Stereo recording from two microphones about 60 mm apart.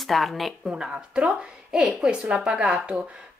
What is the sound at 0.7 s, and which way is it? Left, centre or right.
Speech, centre.